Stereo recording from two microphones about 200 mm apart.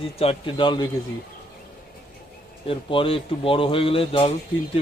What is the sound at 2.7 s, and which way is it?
Speech, 25° left (ahead or behind).